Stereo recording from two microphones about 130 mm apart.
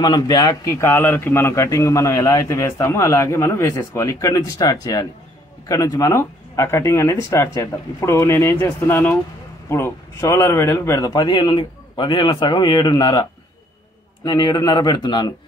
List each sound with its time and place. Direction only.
0.0 s a man's voice: 30° left (ahead or behind)